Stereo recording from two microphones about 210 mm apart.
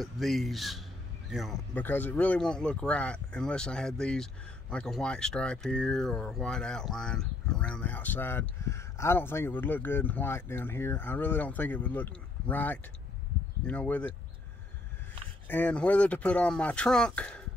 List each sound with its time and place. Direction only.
0.0 s speech: centre (ahead or behind)
15.4 s speech: 10° left (ahead or behind)